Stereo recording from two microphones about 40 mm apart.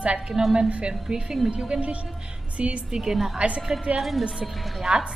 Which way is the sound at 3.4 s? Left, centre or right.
Right.